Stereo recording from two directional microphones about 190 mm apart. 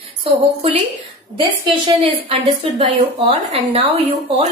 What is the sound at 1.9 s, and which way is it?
A woman's voice, 30° right (ahead or behind).